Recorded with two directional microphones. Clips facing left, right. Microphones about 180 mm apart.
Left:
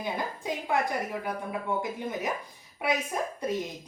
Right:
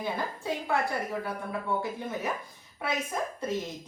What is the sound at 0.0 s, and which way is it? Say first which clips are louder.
Speech: even; 15° left (ahead or behind).